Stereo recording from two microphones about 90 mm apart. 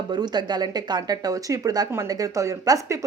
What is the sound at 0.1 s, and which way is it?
Speech, 50° right (ahead or behind).